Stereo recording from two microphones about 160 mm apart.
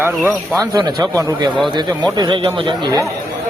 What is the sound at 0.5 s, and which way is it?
Speech, 25° right (ahead or behind).